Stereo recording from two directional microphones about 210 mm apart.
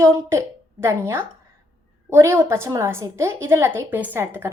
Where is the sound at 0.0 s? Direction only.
15° right (ahead or behind).